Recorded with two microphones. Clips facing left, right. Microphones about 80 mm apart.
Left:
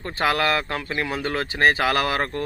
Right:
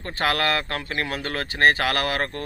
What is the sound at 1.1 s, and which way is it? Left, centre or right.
Speech, centre.